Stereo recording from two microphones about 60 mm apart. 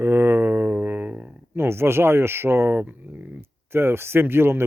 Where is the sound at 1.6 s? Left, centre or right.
Right.